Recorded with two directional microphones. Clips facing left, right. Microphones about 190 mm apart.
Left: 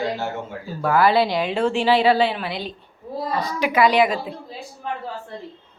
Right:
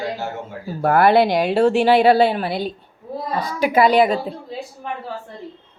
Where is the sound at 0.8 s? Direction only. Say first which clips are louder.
Right 3 dB; 55° right (ahead or behind); by 4.3 s 40° right (ahead or behind).